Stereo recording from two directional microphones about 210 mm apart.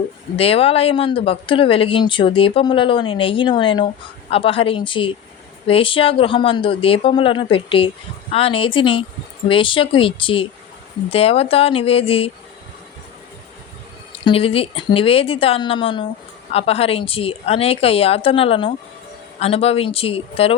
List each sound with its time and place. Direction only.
0.3 s speech: 25° left (ahead or behind)
14.3 s speech: 25° left (ahead or behind)